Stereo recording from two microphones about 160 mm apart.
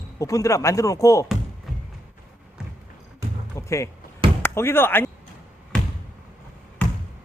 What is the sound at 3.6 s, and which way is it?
Speech, 20° left (ahead or behind).